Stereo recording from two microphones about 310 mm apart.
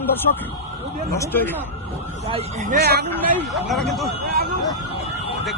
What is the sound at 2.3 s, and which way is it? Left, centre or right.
Speech, right.